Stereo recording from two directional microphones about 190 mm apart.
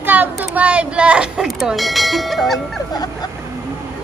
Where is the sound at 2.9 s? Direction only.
20° left (ahead or behind).